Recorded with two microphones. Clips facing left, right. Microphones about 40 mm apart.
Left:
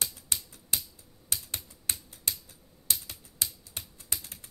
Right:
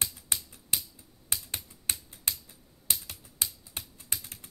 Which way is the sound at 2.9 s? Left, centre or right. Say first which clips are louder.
Even; right.